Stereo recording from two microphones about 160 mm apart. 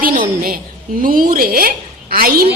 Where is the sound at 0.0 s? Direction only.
65° right (ahead or behind).